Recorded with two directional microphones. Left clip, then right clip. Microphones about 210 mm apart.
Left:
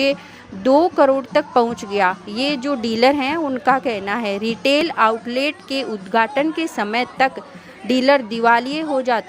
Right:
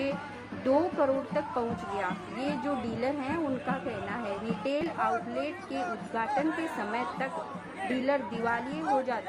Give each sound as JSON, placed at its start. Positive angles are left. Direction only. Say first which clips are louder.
{"t": 0.6, "sound": "a woman's voice", "louder": "left 13 dB", "side_deg": 45}